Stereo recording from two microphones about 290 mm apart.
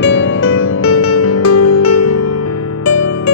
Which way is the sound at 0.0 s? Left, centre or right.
Left.